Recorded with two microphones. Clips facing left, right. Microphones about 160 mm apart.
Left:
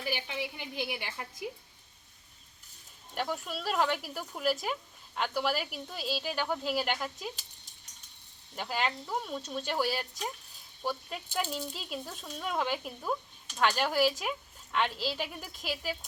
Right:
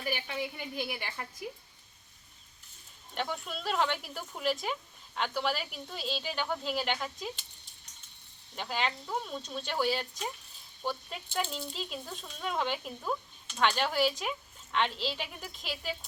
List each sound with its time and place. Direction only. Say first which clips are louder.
0.3 s speech: right 1 dB; 5° left (ahead or behind)
3.2 s speech: left 1 dB; 5° left (ahead or behind)
8.5 s speech: left 1 dB; 5° left (ahead or behind)